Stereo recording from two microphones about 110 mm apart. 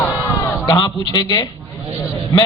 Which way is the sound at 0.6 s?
45° left (ahead or behind).